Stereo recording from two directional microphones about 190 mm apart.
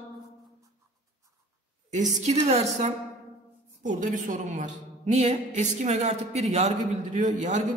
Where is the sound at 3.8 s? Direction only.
40° right (ahead or behind).